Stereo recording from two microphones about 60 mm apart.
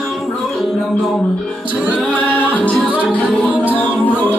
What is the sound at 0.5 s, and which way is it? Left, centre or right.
Music, centre.